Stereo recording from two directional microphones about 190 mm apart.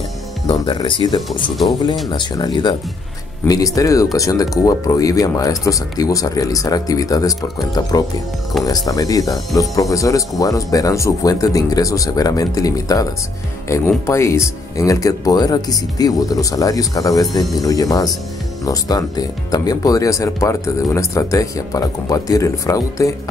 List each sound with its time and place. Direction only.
0.5 s speech: 25° left (ahead or behind)
8.6 s speech: 20° left (ahead or behind)